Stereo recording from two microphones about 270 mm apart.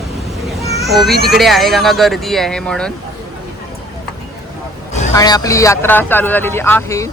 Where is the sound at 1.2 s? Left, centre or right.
Centre.